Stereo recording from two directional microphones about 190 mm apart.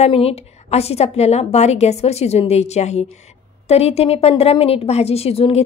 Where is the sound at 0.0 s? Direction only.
30° left (ahead or behind).